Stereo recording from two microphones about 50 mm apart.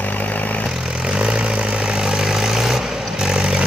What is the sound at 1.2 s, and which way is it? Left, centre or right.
Vehicle, right.